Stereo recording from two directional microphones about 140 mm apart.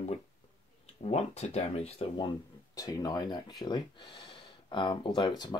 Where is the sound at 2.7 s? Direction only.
25° left (ahead or behind).